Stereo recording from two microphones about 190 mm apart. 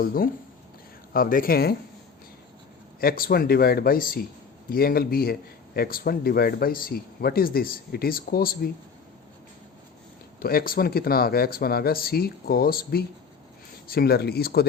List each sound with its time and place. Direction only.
0.0 s speech: 50° left (ahead or behind)
3.0 s speech: 50° left (ahead or behind)
10.4 s speech: 50° left (ahead or behind)